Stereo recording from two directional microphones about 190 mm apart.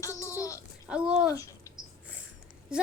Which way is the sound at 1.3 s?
15° left (ahead or behind).